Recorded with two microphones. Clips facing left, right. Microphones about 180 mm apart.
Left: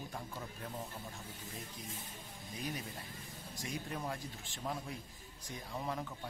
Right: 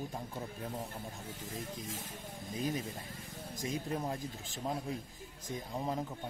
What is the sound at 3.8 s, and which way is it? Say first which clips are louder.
Speech: right 5 dB; 25° right (ahead or behind).